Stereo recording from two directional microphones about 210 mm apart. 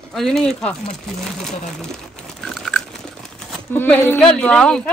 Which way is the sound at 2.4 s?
Centre (ahead or behind).